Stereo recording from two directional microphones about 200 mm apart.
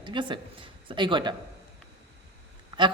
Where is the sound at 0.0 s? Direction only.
25° right (ahead or behind).